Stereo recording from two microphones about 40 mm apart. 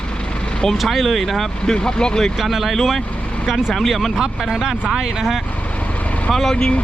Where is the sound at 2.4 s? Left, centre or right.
Centre.